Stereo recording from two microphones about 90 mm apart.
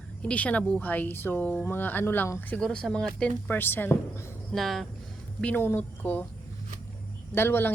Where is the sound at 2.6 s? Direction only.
5° left (ahead or behind).